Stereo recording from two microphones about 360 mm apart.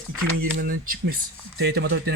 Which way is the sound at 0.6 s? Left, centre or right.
Right.